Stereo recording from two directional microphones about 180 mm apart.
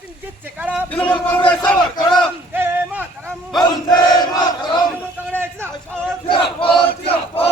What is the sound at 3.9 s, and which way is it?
Battle cry, 25° left (ahead or behind).